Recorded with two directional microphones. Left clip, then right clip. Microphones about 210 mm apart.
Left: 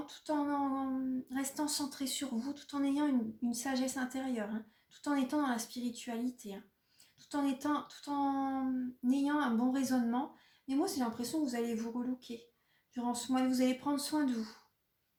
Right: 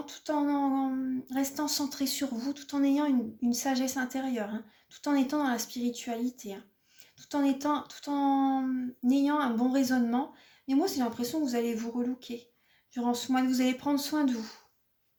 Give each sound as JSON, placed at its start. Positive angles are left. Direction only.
{"t": 0.0, "sound": "speech", "side_deg": -40}